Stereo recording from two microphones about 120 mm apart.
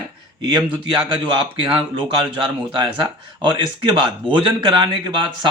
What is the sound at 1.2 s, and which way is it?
A man's voice, 45° right (ahead or behind).